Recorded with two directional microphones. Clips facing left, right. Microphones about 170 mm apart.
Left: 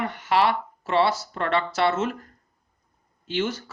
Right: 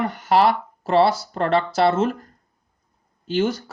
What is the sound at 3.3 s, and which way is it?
Speech, 40° right (ahead or behind).